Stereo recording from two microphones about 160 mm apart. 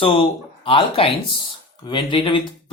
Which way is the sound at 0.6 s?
35° left (ahead or behind).